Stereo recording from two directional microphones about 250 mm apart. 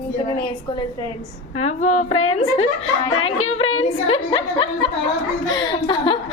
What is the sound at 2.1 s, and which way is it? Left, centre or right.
Speech, left.